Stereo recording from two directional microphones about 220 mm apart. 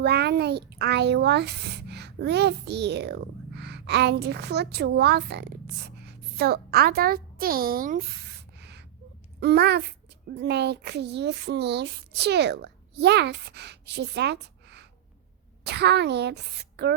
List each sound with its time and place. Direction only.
0.0 s speech: 50° right (ahead or behind)
8.5 s a sound: 50° right (ahead or behind)
9.4 s speech: 50° right (ahead or behind)